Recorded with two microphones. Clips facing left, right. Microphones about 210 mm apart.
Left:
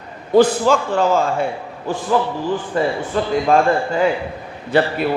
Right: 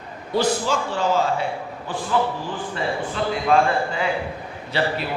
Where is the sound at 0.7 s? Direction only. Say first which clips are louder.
Left 6 dB; 50° left (ahead or behind).